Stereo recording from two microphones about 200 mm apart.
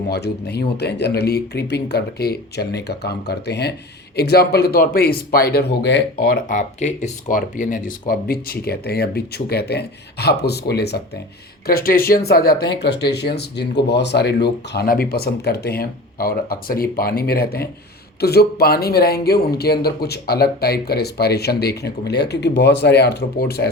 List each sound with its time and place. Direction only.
0.1 s speech: 55° left (ahead or behind)